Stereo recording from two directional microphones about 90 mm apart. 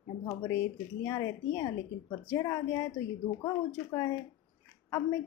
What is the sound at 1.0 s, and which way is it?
A woman's voice, 35° left (ahead or behind).